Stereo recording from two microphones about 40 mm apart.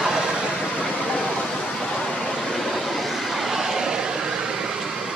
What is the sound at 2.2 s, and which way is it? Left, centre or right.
Vehicle, centre.